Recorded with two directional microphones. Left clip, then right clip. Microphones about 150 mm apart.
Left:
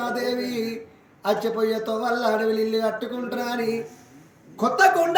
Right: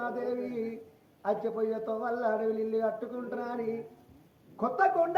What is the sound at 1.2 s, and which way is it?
A man's voice, 20° left (ahead or behind).